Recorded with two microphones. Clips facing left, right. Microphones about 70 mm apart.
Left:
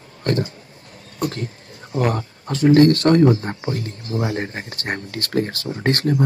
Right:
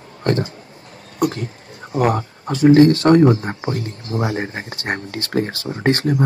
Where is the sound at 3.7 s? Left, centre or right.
Right.